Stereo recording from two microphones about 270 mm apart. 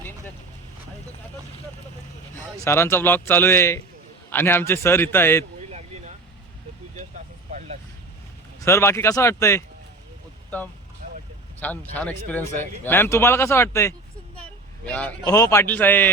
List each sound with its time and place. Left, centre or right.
2.6 s a man's voice: centre
5.6 s a sound: right
7.5 s vehicle: right
8.6 s a man's voice: centre
11.0 s vehicle: right
11.6 s a man's voice: centre